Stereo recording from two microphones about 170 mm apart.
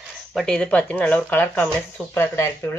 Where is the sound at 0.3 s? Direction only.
Centre (ahead or behind).